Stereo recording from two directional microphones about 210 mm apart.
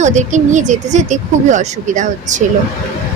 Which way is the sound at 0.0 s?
35° right (ahead or behind).